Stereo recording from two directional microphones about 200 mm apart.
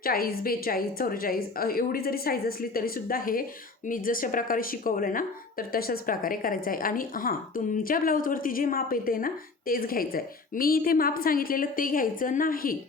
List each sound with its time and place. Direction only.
0.0 s a woman's voice: 50° left (ahead or behind)